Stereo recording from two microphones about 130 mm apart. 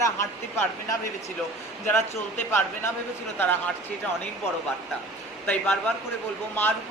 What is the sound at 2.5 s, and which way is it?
Speech, 15° left (ahead or behind).